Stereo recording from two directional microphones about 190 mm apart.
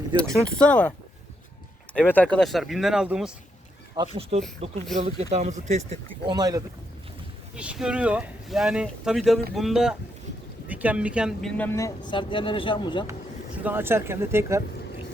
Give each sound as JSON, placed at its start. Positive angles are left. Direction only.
{"t": 0.2, "sound": "speech", "side_deg": 5}
{"t": 3.9, "sound": "speech", "side_deg": -25}
{"t": 6.2, "sound": "speech", "side_deg": -20}
{"t": 7.5, "sound": "speech", "side_deg": -5}
{"t": 13.6, "sound": "speech", "side_deg": -10}